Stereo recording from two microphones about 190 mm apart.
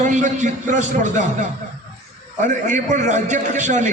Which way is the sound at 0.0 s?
40° right (ahead or behind).